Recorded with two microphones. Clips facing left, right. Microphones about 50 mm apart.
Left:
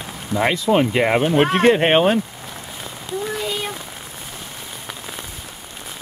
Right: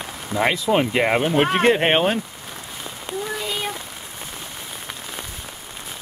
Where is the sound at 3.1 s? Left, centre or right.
Right.